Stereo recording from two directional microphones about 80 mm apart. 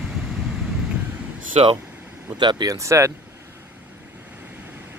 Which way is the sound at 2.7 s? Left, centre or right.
Right.